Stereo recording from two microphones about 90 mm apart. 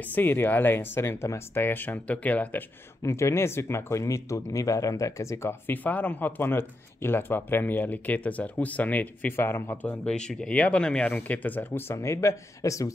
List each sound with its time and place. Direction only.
0.1 s speech: 20° left (ahead or behind)
3.0 s speech: 30° left (ahead or behind)